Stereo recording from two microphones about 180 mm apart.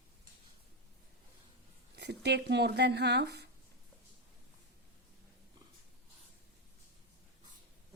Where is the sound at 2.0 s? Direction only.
70° right (ahead or behind).